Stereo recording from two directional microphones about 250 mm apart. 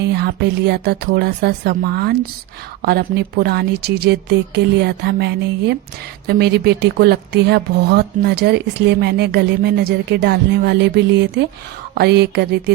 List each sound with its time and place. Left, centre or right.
0.0 s a woman's voice: right